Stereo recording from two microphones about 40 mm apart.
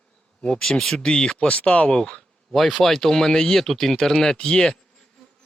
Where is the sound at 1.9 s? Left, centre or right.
Centre.